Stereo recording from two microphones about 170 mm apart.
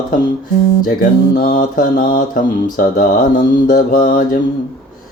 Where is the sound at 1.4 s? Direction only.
55° left (ahead or behind).